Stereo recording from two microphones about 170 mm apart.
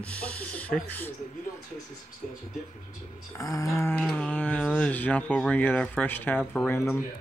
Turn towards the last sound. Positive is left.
turn(degrees=15)  # may be behind; listen again after turning